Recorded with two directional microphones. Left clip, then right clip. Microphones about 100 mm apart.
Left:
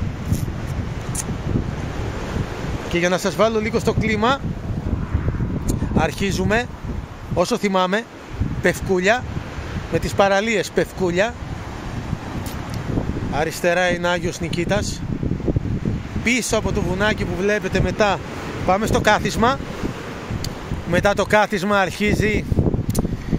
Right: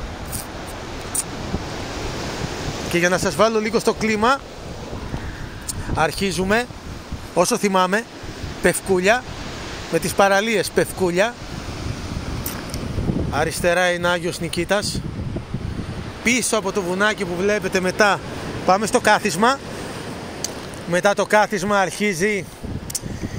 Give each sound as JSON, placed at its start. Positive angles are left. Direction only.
{"t": 2.9, "sound": "speech", "side_deg": 15}
{"t": 5.7, "sound": "speech", "side_deg": 30}
{"t": 7.3, "sound": "speech", "side_deg": 10}
{"t": 13.3, "sound": "speech", "side_deg": 15}
{"t": 16.3, "sound": "speech", "side_deg": 25}
{"t": 17.7, "sound": "speech", "side_deg": 10}
{"t": 18.7, "sound": "speech", "side_deg": 35}
{"t": 20.9, "sound": "speech", "side_deg": 60}